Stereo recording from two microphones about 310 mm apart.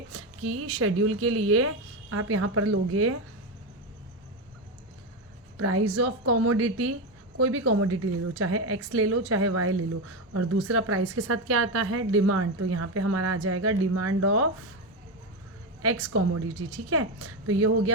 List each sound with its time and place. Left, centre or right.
0.1 s speech: right
5.5 s speech: right
15.8 s speech: right